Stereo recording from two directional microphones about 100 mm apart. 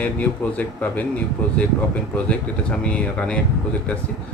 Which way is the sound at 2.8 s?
10° left (ahead or behind).